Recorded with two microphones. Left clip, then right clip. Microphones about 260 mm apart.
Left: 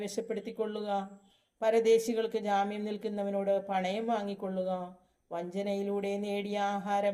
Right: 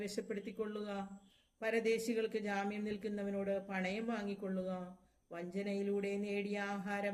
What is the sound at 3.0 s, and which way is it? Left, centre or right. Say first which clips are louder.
Speech: left 11 dB; centre.